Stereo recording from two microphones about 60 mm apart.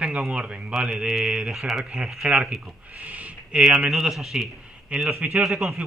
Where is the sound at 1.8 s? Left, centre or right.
Centre.